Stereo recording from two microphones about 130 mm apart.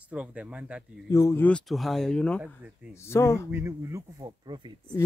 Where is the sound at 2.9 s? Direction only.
20° left (ahead or behind).